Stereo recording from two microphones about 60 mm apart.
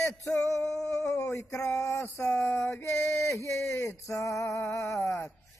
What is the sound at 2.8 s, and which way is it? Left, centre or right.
Male singing, left.